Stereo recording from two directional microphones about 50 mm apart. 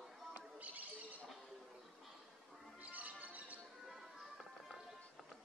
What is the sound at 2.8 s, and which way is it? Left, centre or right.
Music, right.